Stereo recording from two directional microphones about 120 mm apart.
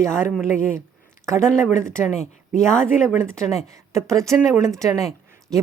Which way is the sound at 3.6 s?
25° right (ahead or behind).